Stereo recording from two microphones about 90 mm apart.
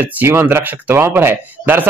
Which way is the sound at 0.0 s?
25° right (ahead or behind).